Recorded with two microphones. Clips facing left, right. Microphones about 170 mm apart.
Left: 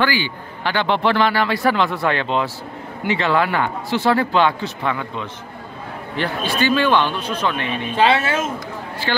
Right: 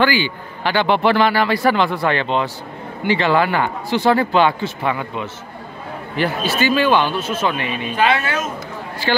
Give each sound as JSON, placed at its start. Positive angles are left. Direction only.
{"t": 0.0, "sound": "speech", "side_deg": -15}
{"t": 7.9, "sound": "speech", "side_deg": 30}